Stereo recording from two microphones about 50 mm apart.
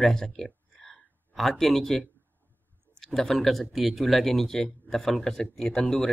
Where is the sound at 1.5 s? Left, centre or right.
Centre.